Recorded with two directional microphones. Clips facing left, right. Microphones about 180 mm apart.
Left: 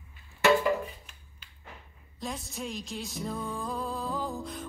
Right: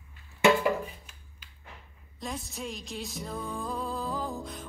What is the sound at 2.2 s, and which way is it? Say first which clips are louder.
Music: even; centre (ahead or behind).